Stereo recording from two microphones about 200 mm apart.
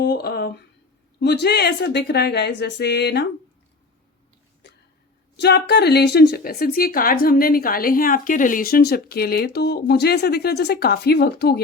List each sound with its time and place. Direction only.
0.0 s speech: 55° left (ahead or behind)
5.4 s a woman's voice: 55° left (ahead or behind)